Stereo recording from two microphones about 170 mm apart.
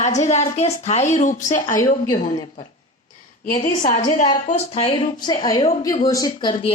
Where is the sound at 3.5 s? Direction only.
50° left (ahead or behind).